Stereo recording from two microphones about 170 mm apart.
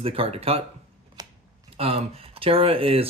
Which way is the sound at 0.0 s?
35° right (ahead or behind).